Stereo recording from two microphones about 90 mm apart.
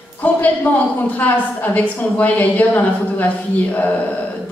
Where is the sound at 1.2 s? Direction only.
15° left (ahead or behind).